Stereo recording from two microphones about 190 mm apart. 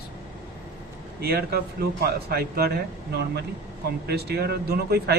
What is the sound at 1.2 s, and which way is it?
A man's voice, 55° right (ahead or behind).